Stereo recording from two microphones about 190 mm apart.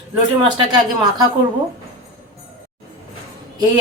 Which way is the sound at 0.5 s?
20° right (ahead or behind).